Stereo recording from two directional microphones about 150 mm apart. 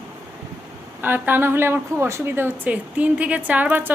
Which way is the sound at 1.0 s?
15° right (ahead or behind).